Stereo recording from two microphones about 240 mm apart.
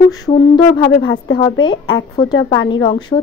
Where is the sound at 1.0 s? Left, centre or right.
Left.